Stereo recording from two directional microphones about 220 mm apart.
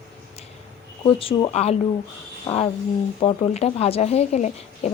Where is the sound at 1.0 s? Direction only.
25° left (ahead or behind).